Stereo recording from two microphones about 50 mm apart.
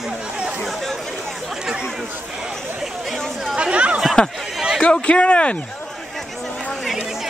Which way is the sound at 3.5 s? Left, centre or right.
Right.